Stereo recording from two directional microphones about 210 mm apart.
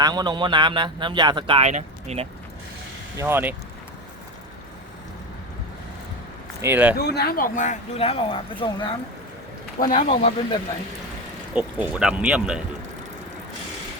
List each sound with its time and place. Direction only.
0.0 s speech: 20° right (ahead or behind)
3.2 s speech: 10° right (ahead or behind)
6.6 s speech: 10° right (ahead or behind)
7.0 s speech: 50° left (ahead or behind); by 8.9 s 25° left (ahead or behind)
9.9 s speech: 35° left (ahead or behind)
11.5 s speech: 5° right (ahead or behind)